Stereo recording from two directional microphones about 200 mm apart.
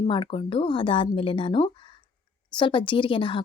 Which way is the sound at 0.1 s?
25° left (ahead or behind).